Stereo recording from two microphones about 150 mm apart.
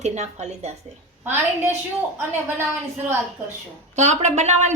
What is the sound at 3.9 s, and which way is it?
Speech, 50° right (ahead or behind).